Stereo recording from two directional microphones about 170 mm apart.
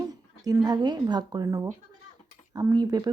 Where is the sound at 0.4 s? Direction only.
20° right (ahead or behind).